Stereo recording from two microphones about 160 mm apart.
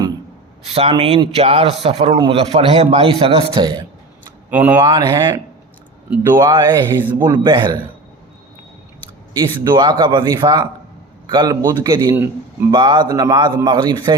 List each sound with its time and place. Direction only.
0.6 s a man's voice: 40° right (ahead or behind)
4.4 s speech: 10° right (ahead or behind)
4.8 s speech: 30° right (ahead or behind)
6.1 s speech: 10° right (ahead or behind)
6.4 s speech: 25° right (ahead or behind)
7.0 s speech: 10° right (ahead or behind)
7.3 s speech: 30° right (ahead or behind)
9.3 s speech: 30° right (ahead or behind)
12.1 s speech: 10° right (ahead or behind)
12.7 s speech: 30° right (ahead or behind)